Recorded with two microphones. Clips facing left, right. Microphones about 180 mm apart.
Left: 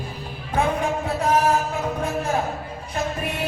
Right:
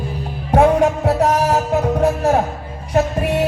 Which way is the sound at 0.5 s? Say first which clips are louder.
Right 9 dB; 75° right (ahead or behind).